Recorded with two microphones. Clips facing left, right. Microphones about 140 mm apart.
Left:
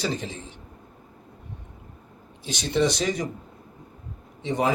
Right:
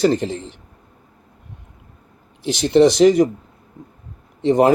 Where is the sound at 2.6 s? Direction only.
90° right.